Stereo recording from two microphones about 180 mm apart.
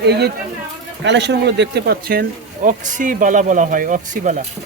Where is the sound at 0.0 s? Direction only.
65° right (ahead or behind).